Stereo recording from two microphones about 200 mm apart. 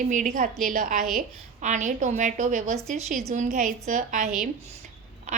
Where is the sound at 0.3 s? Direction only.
40° right (ahead or behind).